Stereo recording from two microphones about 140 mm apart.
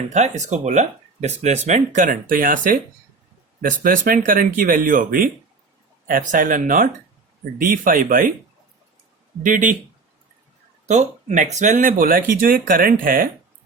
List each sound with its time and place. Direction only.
0.1 s speech: 55° right (ahead or behind); by 5.3 s 90° right
6.1 s speech: 75° right (ahead or behind)
7.6 s speech: 85° right
9.4 s speech: 70° right (ahead or behind)
10.8 s speech: 60° right (ahead or behind); by 13.2 s 90° right